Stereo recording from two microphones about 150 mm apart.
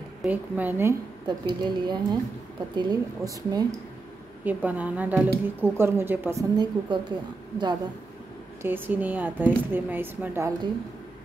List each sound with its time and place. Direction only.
0.2 s a woman's voice: 10° right (ahead or behind)
1.2 s a woman's voice: 30° right (ahead or behind)
4.5 s a woman's voice: 10° right (ahead or behind)
6.5 s a woman's voice: 30° right (ahead or behind)
8.6 s a woman's voice: 15° right (ahead or behind)